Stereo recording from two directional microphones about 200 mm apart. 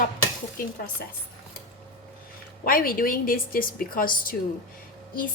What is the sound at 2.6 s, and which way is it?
Speech, 45° left (ahead or behind).